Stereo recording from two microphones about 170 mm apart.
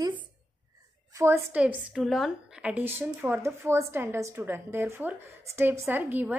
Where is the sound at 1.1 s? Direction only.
15° right (ahead or behind).